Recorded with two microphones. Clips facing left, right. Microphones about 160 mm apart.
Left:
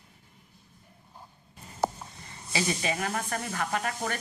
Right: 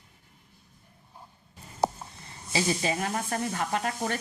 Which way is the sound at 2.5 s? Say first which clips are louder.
Right 2 dB; 30° right (ahead or behind).